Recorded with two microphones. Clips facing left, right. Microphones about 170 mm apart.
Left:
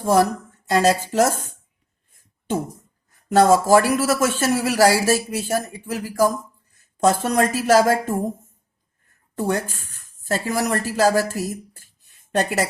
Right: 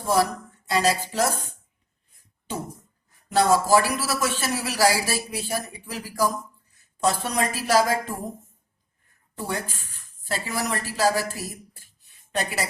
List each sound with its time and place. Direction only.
0.0 s a man's voice: 45° left (ahead or behind)
3.1 s a man's voice: 50° left (ahead or behind)
9.4 s a man's voice: 45° left (ahead or behind)